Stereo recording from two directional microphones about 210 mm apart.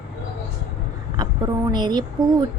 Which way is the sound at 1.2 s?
20° right (ahead or behind).